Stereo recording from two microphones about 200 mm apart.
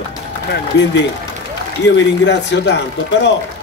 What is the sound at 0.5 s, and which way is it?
A man's voice, 60° left (ahead or behind).